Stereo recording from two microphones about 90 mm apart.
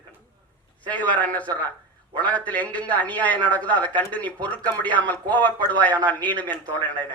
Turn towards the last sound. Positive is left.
turn(degrees=15)  # may be behind; listen again after turning